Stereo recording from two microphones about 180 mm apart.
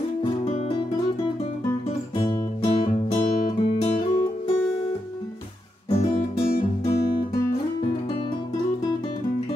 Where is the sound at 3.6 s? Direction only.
35° left (ahead or behind).